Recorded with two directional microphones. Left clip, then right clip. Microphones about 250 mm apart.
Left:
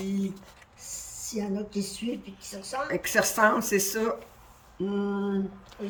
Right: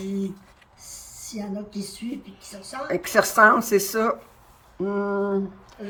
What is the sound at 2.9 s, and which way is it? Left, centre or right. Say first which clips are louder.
Speech: right 7 dB; centre.